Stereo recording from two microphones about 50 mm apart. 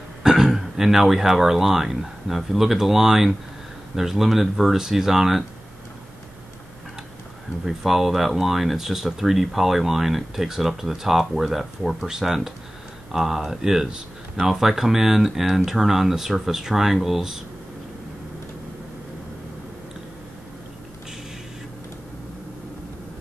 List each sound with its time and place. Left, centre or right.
0.2 s speech: centre
7.6 s speech: centre